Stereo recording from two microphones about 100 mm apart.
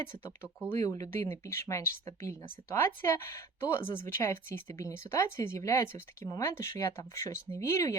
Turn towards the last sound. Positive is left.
turn(degrees=30)  # may be behind; listen again after turning